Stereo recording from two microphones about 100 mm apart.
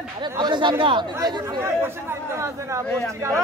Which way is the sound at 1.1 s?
30° right (ahead or behind).